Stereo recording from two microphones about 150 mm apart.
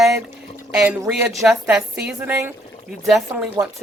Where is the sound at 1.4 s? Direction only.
5° right (ahead or behind).